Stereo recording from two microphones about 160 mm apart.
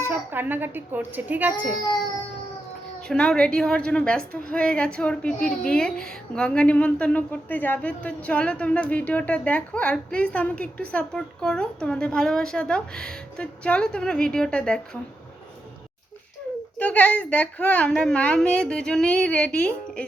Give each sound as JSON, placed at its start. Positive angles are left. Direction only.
{"t": 0.0, "sound": "a child's voice", "side_deg": -15}
{"t": 3.1, "sound": "a woman's voice", "side_deg": 5}
{"t": 16.7, "sound": "a woman's voice", "side_deg": 10}